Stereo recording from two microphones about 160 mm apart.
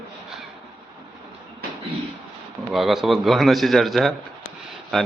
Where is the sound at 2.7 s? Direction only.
Centre (ahead or behind).